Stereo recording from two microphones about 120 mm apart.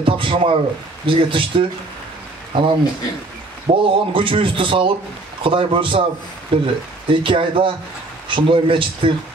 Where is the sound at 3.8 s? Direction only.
45° right (ahead or behind).